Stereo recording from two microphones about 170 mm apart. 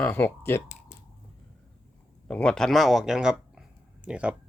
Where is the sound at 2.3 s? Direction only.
5° left (ahead or behind).